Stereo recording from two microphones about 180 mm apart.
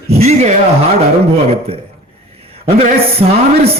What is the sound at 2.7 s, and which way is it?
Speech, 35° right (ahead or behind).